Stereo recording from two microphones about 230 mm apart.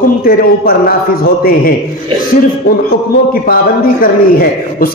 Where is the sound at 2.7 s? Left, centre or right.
Left.